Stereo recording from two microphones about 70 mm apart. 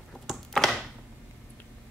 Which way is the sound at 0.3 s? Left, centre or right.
Centre.